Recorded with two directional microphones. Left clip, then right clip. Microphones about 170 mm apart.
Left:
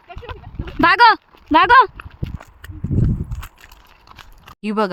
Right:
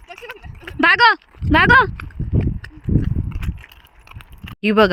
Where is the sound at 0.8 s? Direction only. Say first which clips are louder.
Left 1 dB; 10° left (ahead or behind).